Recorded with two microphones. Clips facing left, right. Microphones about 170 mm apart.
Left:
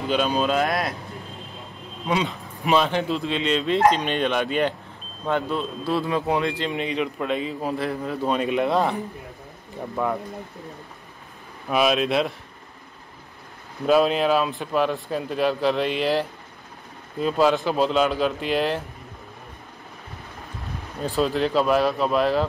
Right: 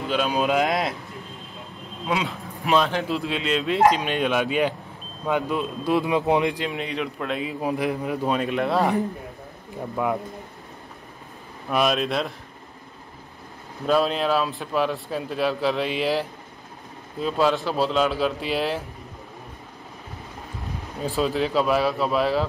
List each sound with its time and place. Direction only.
0.3 s speech: 15° right (ahead or behind)
2.0 s speech: centre (ahead or behind)
6.7 s speech: centre (ahead or behind)
7.6 s speech: 15° right (ahead or behind)
8.4 s speech: centre (ahead or behind)
10.0 s speech: 10° right (ahead or behind)
11.7 s speech: centre (ahead or behind)
13.8 s speech: 5° left (ahead or behind)
21.0 s speech: 5° right (ahead or behind)